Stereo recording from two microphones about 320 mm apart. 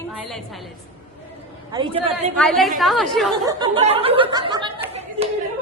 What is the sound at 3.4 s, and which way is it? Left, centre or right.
Speech, centre.